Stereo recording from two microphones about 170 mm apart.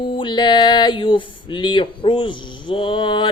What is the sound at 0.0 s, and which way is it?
Mantra, 30° left (ahead or behind).